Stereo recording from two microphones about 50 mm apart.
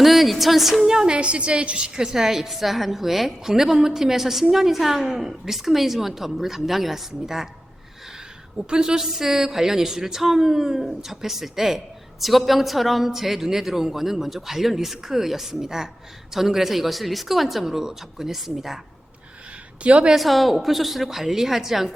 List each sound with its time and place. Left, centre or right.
0.0 s a woman's voice: centre
1.1 s a woman's voice: right
2.1 s a woman's voice: centre
8.5 s a woman's voice: centre
19.8 s a woman's voice: right
20.1 s a woman's voice: centre